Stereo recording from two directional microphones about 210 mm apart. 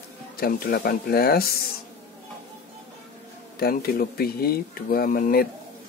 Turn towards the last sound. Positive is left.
turn(degrees=45)  # may be behind; listen again after turning